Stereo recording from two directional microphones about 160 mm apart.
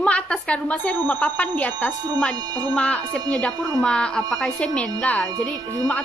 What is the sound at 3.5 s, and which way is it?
Speech, 25° right (ahead or behind).